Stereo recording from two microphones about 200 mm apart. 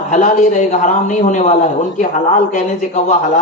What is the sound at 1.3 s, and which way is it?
A man's voice, 35° left (ahead or behind).